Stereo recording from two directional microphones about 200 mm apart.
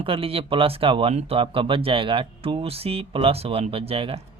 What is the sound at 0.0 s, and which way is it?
Speech, 25° right (ahead or behind).